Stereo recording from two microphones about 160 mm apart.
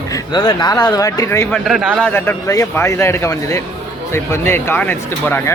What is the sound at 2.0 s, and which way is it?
A man's voice, 10° left (ahead or behind).